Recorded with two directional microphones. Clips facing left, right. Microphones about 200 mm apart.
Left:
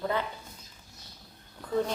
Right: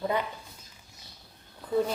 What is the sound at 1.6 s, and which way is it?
Speech, 10° right (ahead or behind).